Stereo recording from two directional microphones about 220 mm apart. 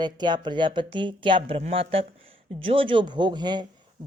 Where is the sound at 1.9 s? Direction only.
25° right (ahead or behind).